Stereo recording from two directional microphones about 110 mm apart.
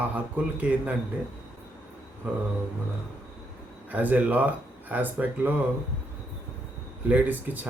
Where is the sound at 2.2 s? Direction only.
15° right (ahead or behind).